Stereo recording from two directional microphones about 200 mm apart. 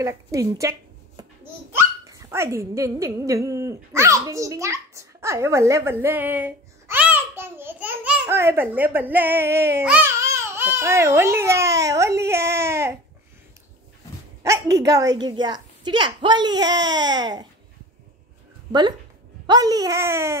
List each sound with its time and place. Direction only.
0.0 s a child's voice: 15° right (ahead or behind)
14.4 s speech: 15° right (ahead or behind)
18.7 s a child's voice: 20° right (ahead or behind)